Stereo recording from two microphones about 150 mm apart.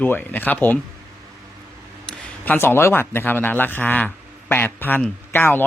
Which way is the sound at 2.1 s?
10° left (ahead or behind).